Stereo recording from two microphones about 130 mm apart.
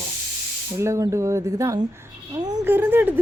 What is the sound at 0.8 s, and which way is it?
Speech, 20° right (ahead or behind).